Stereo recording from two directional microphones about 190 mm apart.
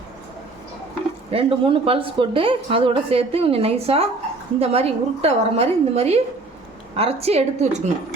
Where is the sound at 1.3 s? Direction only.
30° right (ahead or behind).